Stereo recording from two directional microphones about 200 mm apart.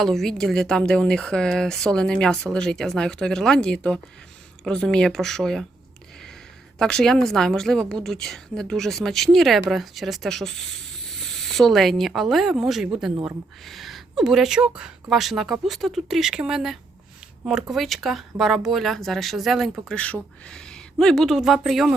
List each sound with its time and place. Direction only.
0.0 s a woman's voice: centre (ahead or behind)
6.7 s a woman's voice: 5° left (ahead or behind)